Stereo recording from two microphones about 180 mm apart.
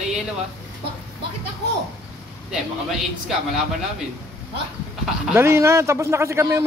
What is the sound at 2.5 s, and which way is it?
Speech, 5° right (ahead or behind).